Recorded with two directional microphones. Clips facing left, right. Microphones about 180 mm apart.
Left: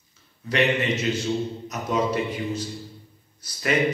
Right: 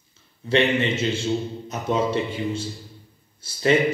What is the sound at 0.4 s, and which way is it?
A man's voice, 25° right (ahead or behind).